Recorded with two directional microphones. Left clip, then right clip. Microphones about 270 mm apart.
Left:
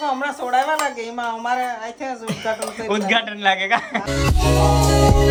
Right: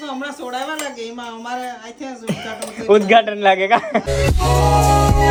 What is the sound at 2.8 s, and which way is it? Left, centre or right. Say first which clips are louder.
A man's voice: right 10 dB; centre.